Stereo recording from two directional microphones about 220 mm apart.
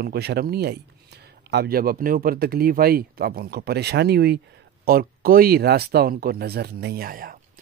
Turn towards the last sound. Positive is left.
turn(degrees=-40)  # may be behind; listen again after turning